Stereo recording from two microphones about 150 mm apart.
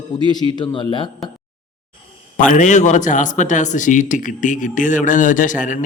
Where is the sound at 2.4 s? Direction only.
55° left (ahead or behind).